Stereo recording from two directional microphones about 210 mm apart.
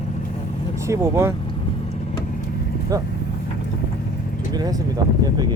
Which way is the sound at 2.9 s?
15° right (ahead or behind).